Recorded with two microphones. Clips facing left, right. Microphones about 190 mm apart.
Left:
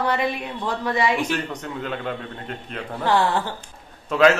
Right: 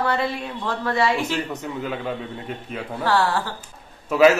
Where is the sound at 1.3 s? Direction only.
10° right (ahead or behind).